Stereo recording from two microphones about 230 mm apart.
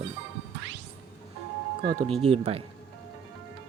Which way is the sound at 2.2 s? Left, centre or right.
Right.